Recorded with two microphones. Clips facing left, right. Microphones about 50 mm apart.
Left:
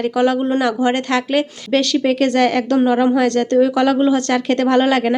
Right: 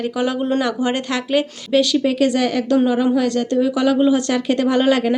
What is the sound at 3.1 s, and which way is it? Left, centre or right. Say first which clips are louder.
Speech: left 3 dB; left.